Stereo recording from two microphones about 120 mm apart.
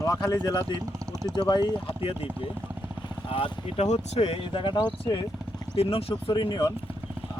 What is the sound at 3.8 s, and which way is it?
Speech, 65° left (ahead or behind).